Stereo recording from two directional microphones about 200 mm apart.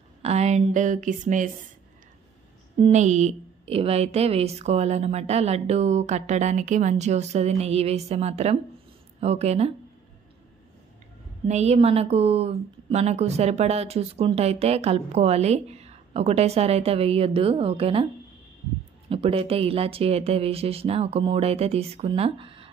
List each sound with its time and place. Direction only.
0.2 s speech: 35° right (ahead or behind)
2.8 s a woman's voice: 35° right (ahead or behind)
11.4 s a woman's voice: 35° right (ahead or behind)
19.0 s speech: 30° right (ahead or behind)